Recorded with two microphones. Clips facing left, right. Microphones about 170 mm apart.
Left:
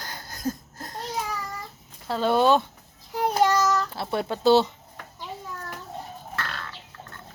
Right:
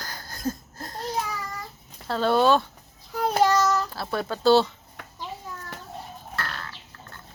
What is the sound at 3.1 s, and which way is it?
Child singing, 20° left (ahead or behind).